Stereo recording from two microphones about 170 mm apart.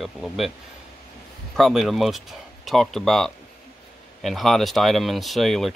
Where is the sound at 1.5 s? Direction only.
Centre (ahead or behind).